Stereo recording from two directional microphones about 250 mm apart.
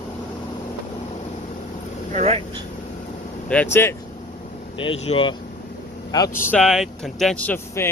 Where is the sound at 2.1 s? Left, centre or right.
Right.